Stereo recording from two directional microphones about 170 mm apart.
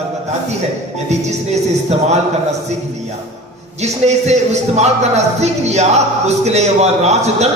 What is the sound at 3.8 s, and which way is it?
Speech, 40° right (ahead or behind).